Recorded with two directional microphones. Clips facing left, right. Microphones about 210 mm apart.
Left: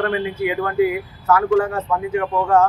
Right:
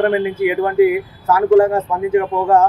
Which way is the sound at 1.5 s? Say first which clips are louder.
Right 6 dB; 35° right (ahead or behind).